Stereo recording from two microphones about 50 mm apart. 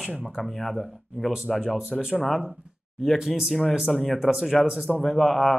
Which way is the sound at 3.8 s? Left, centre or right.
Centre.